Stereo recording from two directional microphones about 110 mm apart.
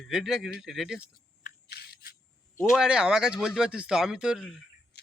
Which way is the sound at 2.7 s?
5° right (ahead or behind).